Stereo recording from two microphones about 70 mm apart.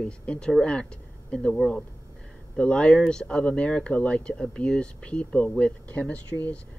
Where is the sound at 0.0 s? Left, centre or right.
Centre.